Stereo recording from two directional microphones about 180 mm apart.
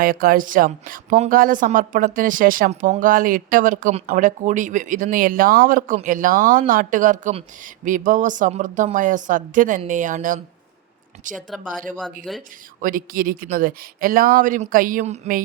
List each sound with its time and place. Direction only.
0.0 s a woman's voice: 50° right (ahead or behind)
11.3 s speech: centre (ahead or behind)
12.8 s a woman's voice: 50° right (ahead or behind)